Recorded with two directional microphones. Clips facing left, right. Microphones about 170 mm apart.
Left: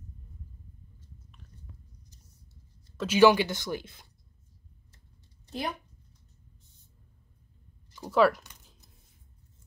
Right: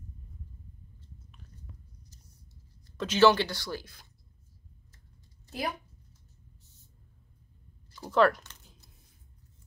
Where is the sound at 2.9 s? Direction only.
10° left (ahead or behind).